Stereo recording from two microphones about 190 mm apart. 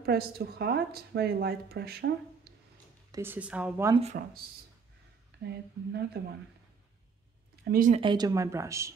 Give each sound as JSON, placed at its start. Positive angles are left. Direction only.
{"t": 0.0, "sound": "speech", "side_deg": -55}
{"t": 3.1, "sound": "speech", "side_deg": -10}
{"t": 3.9, "sound": "speech", "side_deg": -35}
{"t": 5.3, "sound": "a sound", "side_deg": -60}
{"t": 5.9, "sound": "speech", "side_deg": -60}
{"t": 7.6, "sound": "speech", "side_deg": -50}
{"t": 7.9, "sound": "speech", "side_deg": -25}